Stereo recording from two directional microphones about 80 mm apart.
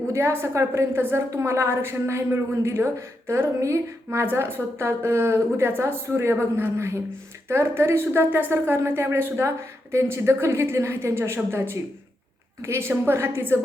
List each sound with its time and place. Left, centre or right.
0.1 s a woman's voice: right